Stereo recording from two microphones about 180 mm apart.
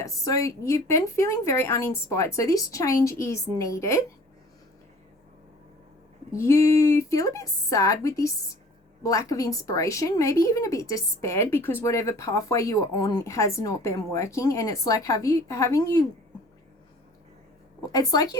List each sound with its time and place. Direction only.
0.0 s speech: 15° left (ahead or behind)
6.3 s speech: 15° left (ahead or behind)
17.9 s a woman's voice: 20° left (ahead or behind)